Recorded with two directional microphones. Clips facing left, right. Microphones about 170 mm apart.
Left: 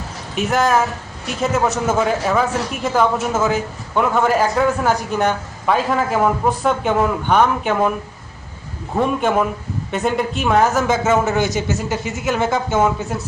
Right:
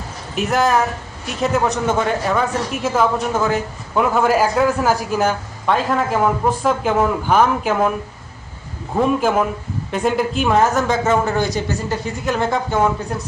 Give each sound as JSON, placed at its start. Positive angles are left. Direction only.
{"t": 0.3, "sound": "speech", "side_deg": 0}
{"t": 9.0, "sound": "speech", "side_deg": 0}
{"t": 11.3, "sound": "speech", "side_deg": 20}
{"t": 12.1, "sound": "speech", "side_deg": 0}